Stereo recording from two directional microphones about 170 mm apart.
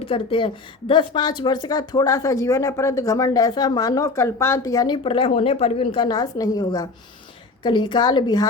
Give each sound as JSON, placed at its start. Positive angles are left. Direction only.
{"t": 0.0, "sound": "a woman's voice", "side_deg": 30}
{"t": 5.0, "sound": "a woman's voice", "side_deg": 30}